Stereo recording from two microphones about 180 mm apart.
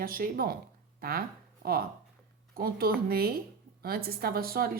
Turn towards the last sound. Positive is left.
turn(degrees=-55)  # may be behind; listen again after turning